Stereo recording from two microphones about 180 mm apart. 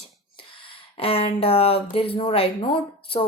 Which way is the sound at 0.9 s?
30° left (ahead or behind).